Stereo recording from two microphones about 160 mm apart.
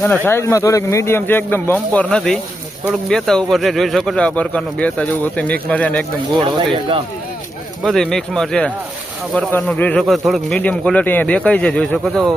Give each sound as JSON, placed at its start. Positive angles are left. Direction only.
{"t": 0.3, "sound": "speech", "side_deg": 15}
{"t": 6.7, "sound": "speech", "side_deg": -30}
{"t": 7.8, "sound": "speech", "side_deg": 0}